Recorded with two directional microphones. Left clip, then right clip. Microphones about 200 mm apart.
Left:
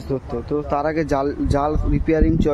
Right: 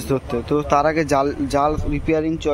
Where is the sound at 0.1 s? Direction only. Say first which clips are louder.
Right 3 dB; centre (ahead or behind).